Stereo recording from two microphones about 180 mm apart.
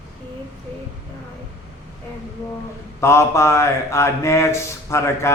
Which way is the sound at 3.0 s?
15° left (ahead or behind).